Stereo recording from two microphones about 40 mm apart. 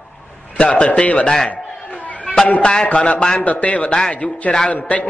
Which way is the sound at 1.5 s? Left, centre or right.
Left.